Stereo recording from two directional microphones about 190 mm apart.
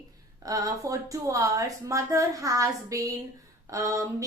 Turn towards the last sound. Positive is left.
turn(degrees=-15)  # may be behind; listen again after turning